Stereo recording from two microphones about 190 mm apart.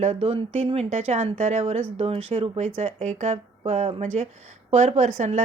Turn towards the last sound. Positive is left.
turn(degrees=-40)  # may be behind; listen again after turning